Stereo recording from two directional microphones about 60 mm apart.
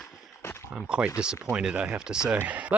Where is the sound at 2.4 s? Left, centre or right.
Right.